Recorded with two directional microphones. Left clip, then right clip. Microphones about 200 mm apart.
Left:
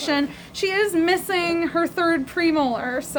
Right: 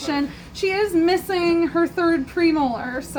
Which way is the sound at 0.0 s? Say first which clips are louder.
Left 2 dB; 30° left (ahead or behind).